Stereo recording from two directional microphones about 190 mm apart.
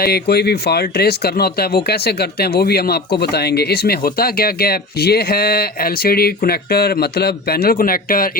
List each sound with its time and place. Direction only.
0.0 s speech: 55° left (ahead or behind)